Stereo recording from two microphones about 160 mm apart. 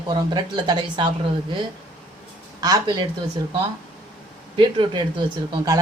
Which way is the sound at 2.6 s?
25° right (ahead or behind).